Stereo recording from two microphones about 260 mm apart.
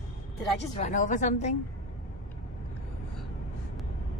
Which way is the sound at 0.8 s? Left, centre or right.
Left.